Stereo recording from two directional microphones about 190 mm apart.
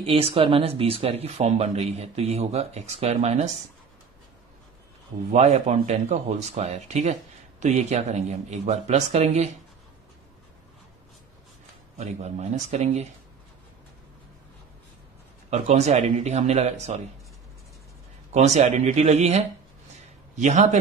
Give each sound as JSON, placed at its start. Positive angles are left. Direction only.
{"t": 0.0, "sound": "speech", "side_deg": -30}
{"t": 5.3, "sound": "speech", "side_deg": -35}
{"t": 12.0, "sound": "speech", "side_deg": -35}
{"t": 15.5, "sound": "speech", "side_deg": -35}
{"t": 18.3, "sound": "speech", "side_deg": -35}